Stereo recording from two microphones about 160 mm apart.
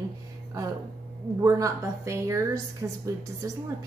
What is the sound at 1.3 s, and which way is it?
A woman's voice, 20° right (ahead or behind).